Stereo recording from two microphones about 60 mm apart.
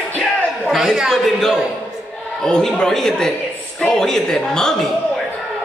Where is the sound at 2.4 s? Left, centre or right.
Centre.